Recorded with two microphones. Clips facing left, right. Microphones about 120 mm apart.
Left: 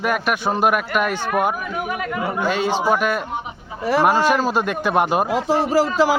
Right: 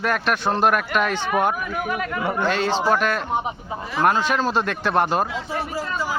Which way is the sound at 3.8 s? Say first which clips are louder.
Left 9 dB; 65° left (ahead or behind).